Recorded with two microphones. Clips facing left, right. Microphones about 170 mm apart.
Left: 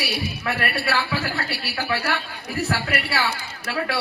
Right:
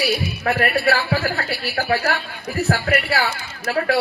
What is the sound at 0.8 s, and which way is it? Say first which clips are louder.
Speech: right 5 dB; 55° right (ahead or behind).